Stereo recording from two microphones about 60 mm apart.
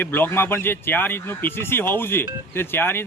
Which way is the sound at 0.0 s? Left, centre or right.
Left.